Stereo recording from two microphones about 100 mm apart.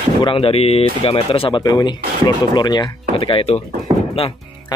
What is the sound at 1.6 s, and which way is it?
Speech, 40° left (ahead or behind).